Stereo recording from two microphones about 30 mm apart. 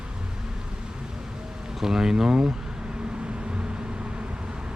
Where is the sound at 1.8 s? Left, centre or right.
Centre.